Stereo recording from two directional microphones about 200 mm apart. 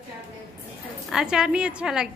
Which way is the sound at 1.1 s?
5° right (ahead or behind).